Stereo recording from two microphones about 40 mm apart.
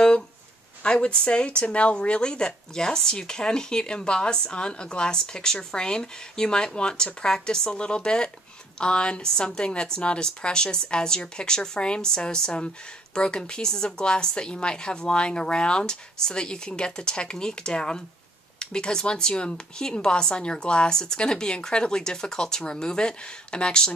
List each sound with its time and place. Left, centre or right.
0.8 s a woman's voice: left